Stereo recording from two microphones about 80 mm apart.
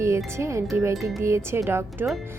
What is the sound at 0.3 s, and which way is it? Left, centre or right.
Speech, right.